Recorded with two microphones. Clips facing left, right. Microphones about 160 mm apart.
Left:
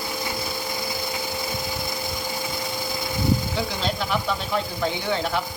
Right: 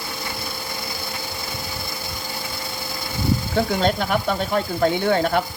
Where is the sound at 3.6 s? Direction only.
55° right (ahead or behind).